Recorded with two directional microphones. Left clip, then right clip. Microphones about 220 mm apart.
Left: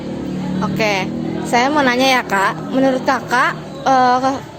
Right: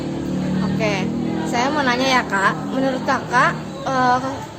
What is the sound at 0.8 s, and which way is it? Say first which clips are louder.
Speech: left 5 dB; 35° left (ahead or behind).